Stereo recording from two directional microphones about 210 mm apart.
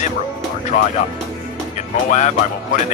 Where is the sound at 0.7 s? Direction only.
35° left (ahead or behind).